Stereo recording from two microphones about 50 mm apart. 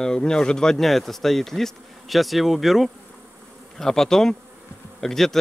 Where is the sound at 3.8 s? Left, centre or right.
Centre.